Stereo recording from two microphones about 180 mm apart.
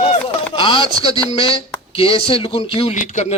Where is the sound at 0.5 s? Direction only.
25° left (ahead or behind).